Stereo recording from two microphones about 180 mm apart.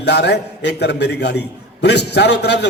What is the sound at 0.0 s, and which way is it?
A man's voice, 70° left (ahead or behind).